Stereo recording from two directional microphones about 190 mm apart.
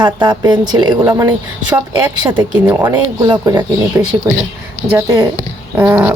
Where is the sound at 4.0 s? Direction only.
15° right (ahead or behind).